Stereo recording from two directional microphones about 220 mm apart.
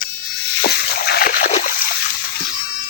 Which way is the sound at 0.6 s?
45° left (ahead or behind).